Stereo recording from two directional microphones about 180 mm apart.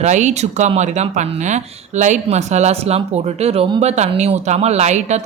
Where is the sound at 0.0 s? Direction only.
40° right (ahead or behind).